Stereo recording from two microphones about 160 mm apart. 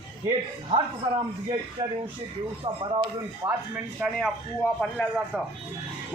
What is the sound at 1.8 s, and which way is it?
Speech, 25° right (ahead or behind).